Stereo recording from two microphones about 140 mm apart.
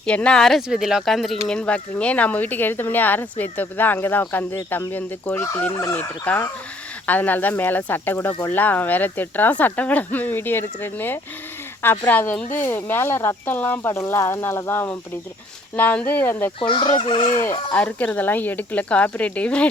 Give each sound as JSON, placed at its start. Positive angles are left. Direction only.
{"t": 0.0, "sound": "speech", "side_deg": 5}
{"t": 16.6, "sound": "fowl", "side_deg": 35}
{"t": 17.7, "sound": "speech", "side_deg": 10}